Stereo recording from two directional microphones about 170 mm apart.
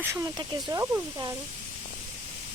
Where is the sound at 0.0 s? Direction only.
15° right (ahead or behind).